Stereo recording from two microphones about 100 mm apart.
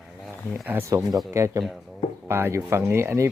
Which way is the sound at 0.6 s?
25° right (ahead or behind).